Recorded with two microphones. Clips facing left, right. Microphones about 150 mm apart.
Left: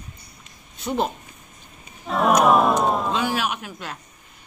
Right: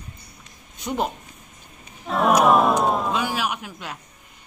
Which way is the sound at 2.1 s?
Centre (ahead or behind).